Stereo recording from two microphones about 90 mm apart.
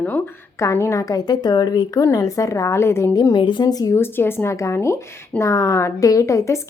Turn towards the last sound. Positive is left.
turn(degrees=35)  # may be behind; listen again after turning